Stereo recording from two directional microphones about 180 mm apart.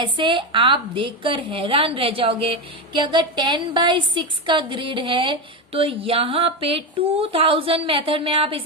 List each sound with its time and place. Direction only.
0.0 s a woman's voice: 25° right (ahead or behind)